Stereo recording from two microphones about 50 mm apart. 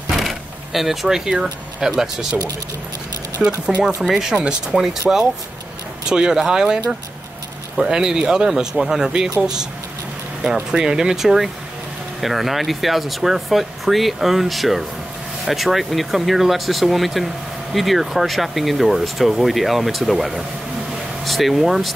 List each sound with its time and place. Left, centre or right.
0.1 s speech: centre
3.4 s speech: centre
6.0 s speech: centre